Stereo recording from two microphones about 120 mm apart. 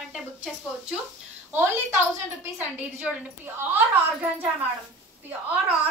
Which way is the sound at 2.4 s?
15° right (ahead or behind).